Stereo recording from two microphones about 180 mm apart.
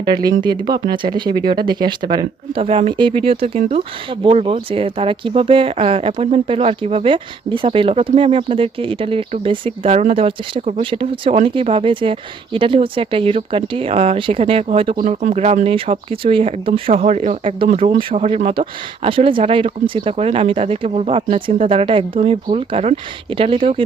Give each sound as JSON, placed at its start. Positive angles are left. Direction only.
{"t": 0.0, "sound": "speech", "side_deg": -25}
{"t": 14.9, "sound": "speech", "side_deg": -40}